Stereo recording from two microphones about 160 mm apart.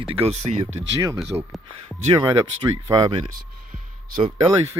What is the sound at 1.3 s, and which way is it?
Speech, 20° right (ahead or behind).